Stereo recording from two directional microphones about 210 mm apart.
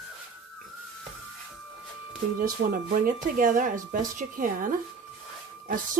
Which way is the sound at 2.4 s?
40° right (ahead or behind).